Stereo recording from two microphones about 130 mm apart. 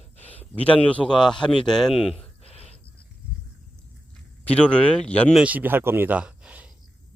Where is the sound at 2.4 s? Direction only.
50° left (ahead or behind).